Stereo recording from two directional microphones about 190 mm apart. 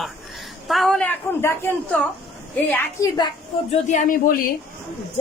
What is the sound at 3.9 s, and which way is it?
Speech, 45° left (ahead or behind).